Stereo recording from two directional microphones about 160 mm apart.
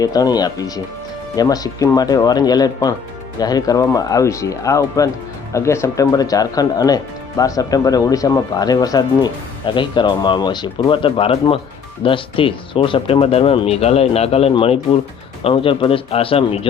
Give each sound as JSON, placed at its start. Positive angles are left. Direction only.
{"t": 0.0, "sound": "speech", "side_deg": 25}